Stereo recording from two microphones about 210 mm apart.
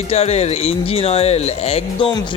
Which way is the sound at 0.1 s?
30° left (ahead or behind).